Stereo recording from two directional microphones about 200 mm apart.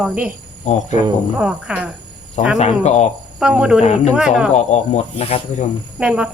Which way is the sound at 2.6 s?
35° left (ahead or behind).